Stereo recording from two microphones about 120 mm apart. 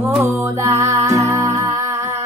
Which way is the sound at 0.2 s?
25° right (ahead or behind).